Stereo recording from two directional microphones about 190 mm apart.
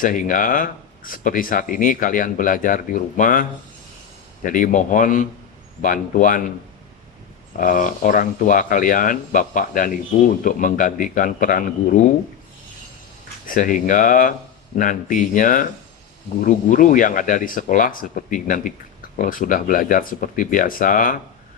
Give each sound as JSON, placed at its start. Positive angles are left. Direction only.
{"t": 0.0, "sound": "speech", "side_deg": 45}
{"t": 4.4, "sound": "speech", "side_deg": 45}
{"t": 7.5, "sound": "speech", "side_deg": 45}
{"t": 13.5, "sound": "speech", "side_deg": 40}